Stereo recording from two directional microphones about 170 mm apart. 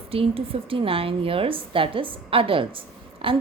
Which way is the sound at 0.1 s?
35° right (ahead or behind).